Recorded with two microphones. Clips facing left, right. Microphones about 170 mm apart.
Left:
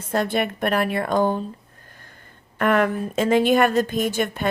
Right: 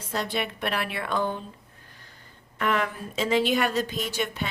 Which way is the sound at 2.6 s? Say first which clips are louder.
Left 7 dB; 55° left (ahead or behind).